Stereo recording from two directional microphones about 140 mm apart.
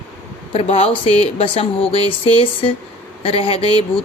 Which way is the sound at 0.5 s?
45° left (ahead or behind).